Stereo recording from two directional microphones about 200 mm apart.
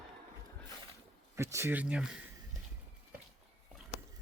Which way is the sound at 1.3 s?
15° right (ahead or behind).